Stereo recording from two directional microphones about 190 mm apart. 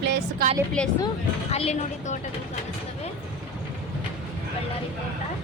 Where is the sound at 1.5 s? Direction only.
35° left (ahead or behind).